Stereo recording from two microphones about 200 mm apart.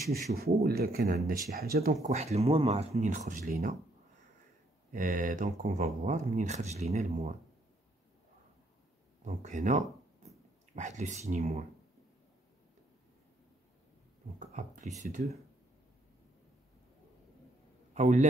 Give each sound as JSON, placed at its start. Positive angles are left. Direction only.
{"t": 0.1, "sound": "speech", "side_deg": -50}
{"t": 4.9, "sound": "speech", "side_deg": -40}
{"t": 9.2, "sound": "speech", "side_deg": -35}
{"t": 14.5, "sound": "speech", "side_deg": -40}
{"t": 17.9, "sound": "a man's voice", "side_deg": -35}